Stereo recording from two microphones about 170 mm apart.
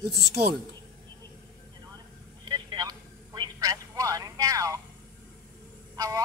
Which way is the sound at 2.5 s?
25° right (ahead or behind).